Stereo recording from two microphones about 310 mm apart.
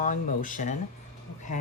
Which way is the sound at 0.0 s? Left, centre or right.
Left.